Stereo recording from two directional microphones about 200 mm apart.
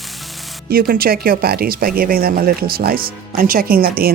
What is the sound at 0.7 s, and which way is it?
Speech, 50° right (ahead or behind).